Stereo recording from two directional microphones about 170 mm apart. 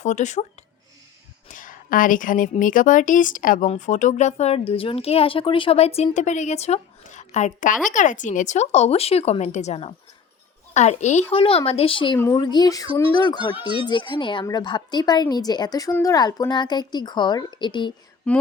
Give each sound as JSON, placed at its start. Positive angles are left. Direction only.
{"t": 0.0, "sound": "a woman's voice", "side_deg": 45}
{"t": 1.5, "sound": "a woman's voice", "side_deg": 50}
{"t": 18.3, "sound": "speech", "side_deg": 5}